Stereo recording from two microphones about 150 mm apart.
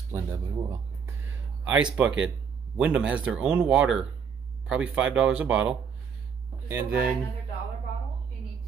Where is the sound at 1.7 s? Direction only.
10° right (ahead or behind).